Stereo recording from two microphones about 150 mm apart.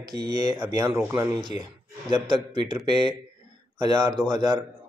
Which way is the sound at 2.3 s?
35° right (ahead or behind).